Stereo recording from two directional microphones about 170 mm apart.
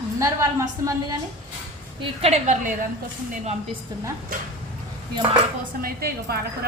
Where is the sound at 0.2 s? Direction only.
20° right (ahead or behind).